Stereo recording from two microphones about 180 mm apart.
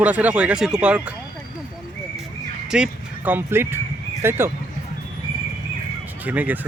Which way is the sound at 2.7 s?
5° right (ahead or behind).